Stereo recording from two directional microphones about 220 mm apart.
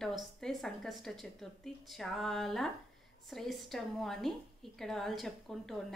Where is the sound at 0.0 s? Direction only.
Centre (ahead or behind).